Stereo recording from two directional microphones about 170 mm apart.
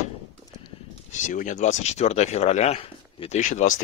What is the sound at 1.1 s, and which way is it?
Speech, 50° left (ahead or behind).